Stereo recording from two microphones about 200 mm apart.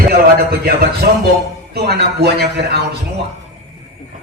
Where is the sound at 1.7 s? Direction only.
55° right (ahead or behind).